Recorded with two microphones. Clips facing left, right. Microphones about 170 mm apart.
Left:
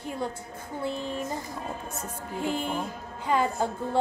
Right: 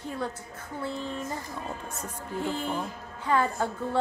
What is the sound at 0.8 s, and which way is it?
Speech, 15° left (ahead or behind).